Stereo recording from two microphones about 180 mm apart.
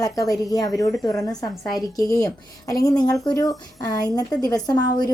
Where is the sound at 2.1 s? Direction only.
20° left (ahead or behind).